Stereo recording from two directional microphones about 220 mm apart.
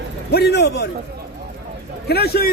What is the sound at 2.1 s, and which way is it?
Speech, 45° left (ahead or behind).